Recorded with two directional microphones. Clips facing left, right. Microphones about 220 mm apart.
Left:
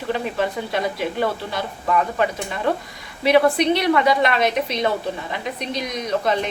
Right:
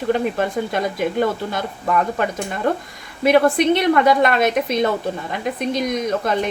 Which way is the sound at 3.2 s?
50° right (ahead or behind).